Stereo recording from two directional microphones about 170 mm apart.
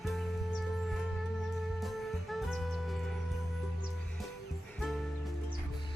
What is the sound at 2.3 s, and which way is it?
Music, centre (ahead or behind).